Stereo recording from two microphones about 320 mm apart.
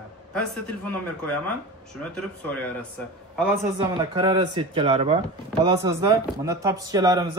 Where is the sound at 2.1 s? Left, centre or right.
Centre.